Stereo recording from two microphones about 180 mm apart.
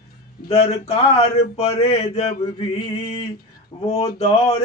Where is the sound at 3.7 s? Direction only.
35° left (ahead or behind).